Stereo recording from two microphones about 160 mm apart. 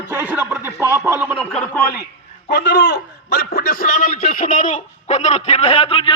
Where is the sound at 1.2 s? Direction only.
Centre (ahead or behind).